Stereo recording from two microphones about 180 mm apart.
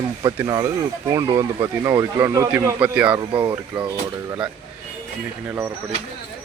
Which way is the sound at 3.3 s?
25° right (ahead or behind).